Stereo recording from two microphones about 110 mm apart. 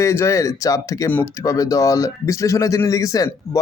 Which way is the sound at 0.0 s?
25° left (ahead or behind).